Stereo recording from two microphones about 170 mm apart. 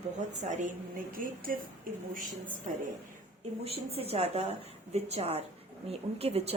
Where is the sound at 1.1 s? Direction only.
55° right (ahead or behind).